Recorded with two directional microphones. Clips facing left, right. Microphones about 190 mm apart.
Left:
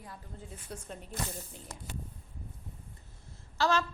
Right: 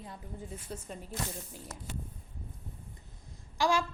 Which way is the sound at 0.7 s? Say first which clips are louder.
Even; 5° left (ahead or behind).